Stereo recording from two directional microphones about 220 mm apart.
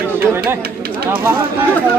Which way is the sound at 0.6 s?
45° right (ahead or behind).